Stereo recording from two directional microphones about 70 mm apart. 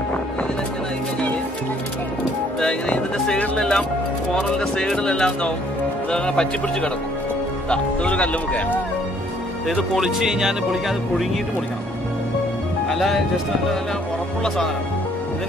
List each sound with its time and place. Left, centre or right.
2.6 s speech: centre
9.9 s speech: centre
12.9 s speech: centre